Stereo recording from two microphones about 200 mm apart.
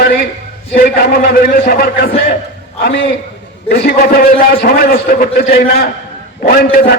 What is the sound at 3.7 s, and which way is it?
A man's voice, 55° left (ahead or behind).